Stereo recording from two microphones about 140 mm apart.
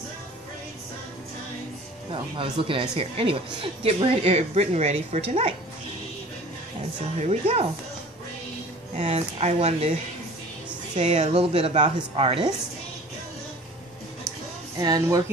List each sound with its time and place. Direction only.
2.0 s speech: 40° right (ahead or behind)
7.2 s speech: 50° right (ahead or behind)
9.0 s speech: 45° right (ahead or behind)
11.0 s speech: 50° right (ahead or behind)
14.8 s speech: 30° right (ahead or behind)